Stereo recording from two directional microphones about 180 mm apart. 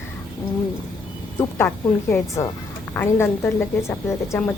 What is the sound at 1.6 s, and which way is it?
A woman's voice, 15° left (ahead or behind).